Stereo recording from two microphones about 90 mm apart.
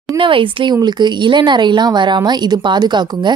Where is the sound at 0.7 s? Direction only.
55° right (ahead or behind).